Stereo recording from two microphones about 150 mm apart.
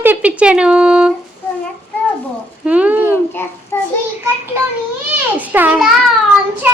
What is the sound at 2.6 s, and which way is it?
Speech, 10° right (ahead or behind).